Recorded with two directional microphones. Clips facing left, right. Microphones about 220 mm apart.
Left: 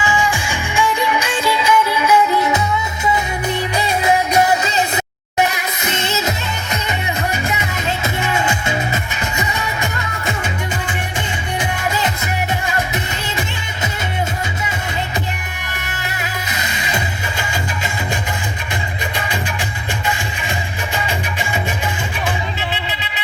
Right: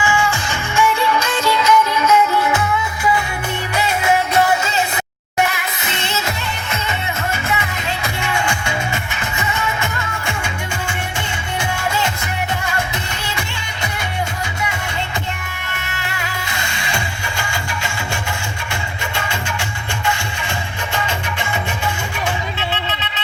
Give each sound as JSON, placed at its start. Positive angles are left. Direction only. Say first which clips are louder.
{"t": 0.0, "sound": "music", "louder": "even", "side_deg": 20}
{"t": 4.3, "sound": "music", "louder": "left 1 dB", "side_deg": 20}
{"t": 11.6, "sound": "music", "louder": "even", "side_deg": 20}
{"t": 16.0, "sound": "music", "louder": "left 1 dB", "side_deg": 20}
{"t": 19.1, "sound": "music", "louder": "even", "side_deg": 15}